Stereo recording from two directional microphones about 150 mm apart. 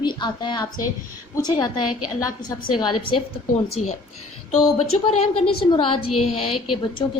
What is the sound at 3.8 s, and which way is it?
A woman's voice, 50° left (ahead or behind).